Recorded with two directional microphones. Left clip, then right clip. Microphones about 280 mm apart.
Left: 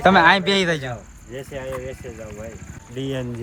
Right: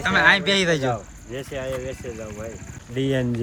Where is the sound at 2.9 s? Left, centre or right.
Right.